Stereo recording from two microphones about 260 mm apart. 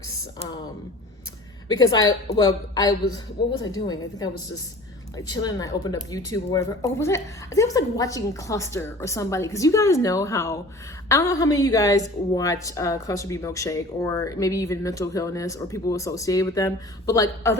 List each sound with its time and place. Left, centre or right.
0.3 s a woman's voice: centre
5.1 s a woman's voice: centre